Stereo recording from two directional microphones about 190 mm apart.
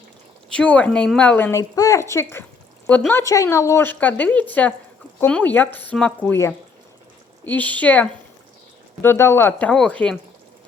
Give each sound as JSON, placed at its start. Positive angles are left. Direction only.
{"t": 0.5, "sound": "a woman's voice", "side_deg": 5}